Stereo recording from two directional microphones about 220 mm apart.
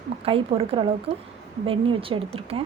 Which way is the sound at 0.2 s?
25° right (ahead or behind).